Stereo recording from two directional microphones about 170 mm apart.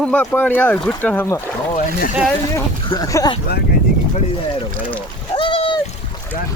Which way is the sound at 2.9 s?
20° left (ahead or behind).